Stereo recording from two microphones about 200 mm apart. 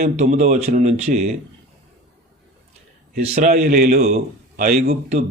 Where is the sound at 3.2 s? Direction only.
35° right (ahead or behind).